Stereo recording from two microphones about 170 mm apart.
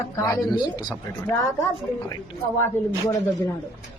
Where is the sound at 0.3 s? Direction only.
25° left (ahead or behind).